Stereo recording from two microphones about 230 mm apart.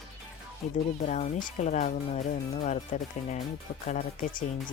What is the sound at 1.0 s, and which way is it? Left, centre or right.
Speech, left.